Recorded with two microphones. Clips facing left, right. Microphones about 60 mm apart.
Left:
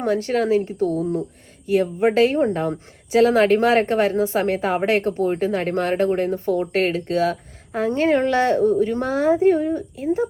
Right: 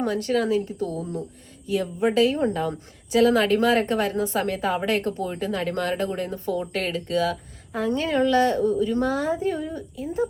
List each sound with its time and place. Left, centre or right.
0.0 s a woman's voice: left